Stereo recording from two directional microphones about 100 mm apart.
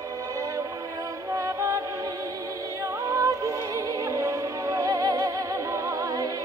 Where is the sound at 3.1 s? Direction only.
35° right (ahead or behind).